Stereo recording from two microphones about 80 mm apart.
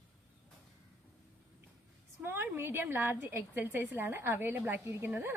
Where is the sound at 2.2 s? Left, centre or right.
Right.